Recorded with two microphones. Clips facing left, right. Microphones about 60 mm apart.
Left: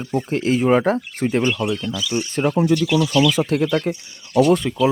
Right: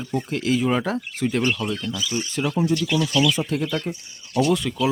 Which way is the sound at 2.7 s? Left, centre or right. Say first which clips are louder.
Left 5 dB; left.